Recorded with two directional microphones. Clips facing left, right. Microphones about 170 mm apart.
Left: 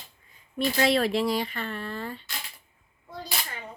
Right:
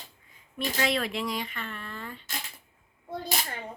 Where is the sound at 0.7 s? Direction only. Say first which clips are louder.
Left 5 dB; 35° left (ahead or behind).